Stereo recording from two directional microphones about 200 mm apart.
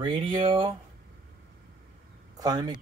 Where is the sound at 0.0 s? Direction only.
25° right (ahead or behind).